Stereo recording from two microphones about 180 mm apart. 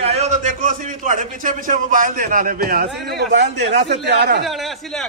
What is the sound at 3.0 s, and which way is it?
A man's voice, 65° right (ahead or behind).